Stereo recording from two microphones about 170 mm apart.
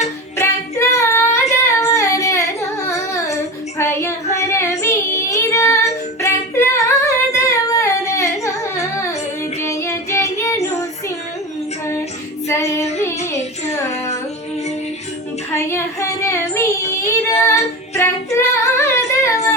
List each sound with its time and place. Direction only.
0.3 s female singing: 15° left (ahead or behind)
3.8 s child singing: 15° left (ahead or behind)
12.5 s child singing: 15° left (ahead or behind)
15.5 s child singing: 15° left (ahead or behind)